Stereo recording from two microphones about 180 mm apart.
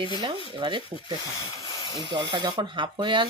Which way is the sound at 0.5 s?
30° right (ahead or behind).